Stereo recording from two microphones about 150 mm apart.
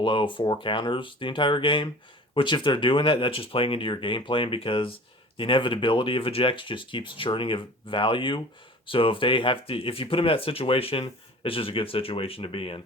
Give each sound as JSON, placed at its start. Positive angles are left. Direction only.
{"t": 0.0, "sound": "speech", "side_deg": 35}